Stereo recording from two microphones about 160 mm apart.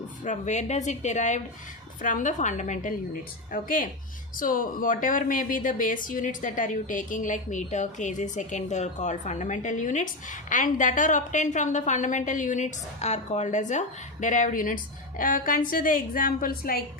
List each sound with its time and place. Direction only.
0.3 s a woman's voice: 45° left (ahead or behind); by 16.8 s 65° left (ahead or behind)